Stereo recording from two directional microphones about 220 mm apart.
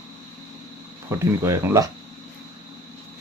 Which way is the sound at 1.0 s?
10° right (ahead or behind).